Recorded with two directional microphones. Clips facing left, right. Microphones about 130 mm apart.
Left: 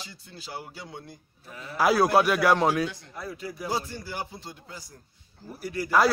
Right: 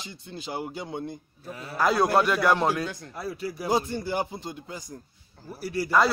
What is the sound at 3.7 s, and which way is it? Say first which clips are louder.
Speech: right 7 dB; 25° right (ahead or behind).